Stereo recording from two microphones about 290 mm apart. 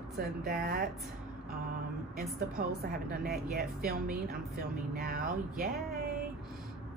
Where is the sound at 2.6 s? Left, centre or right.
Right.